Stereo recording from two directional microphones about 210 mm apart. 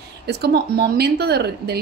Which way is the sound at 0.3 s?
50° right (ahead or behind).